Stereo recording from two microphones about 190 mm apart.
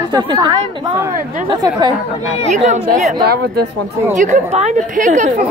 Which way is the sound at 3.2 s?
55° right (ahead or behind).